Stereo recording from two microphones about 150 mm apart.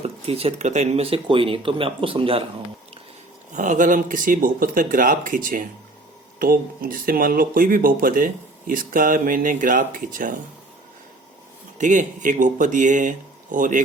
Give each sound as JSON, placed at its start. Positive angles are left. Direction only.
{"t": 0.0, "sound": "speech", "side_deg": -40}
{"t": 3.5, "sound": "speech", "side_deg": -55}
{"t": 6.4, "sound": "speech", "side_deg": -75}
{"t": 11.8, "sound": "speech", "side_deg": -55}